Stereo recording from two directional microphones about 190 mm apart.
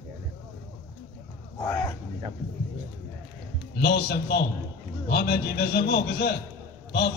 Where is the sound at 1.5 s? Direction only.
20° left (ahead or behind).